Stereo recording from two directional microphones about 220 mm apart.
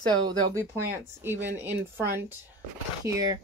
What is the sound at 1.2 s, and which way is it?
Speech, 10° right (ahead or behind).